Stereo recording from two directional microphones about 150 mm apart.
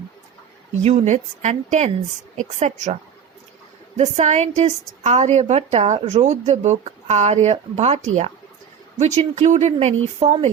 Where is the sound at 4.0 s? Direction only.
45° right (ahead or behind).